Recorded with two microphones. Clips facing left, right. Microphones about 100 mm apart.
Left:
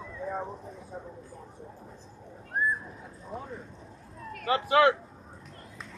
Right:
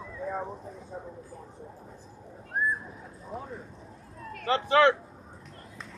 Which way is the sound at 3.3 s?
Centre (ahead or behind).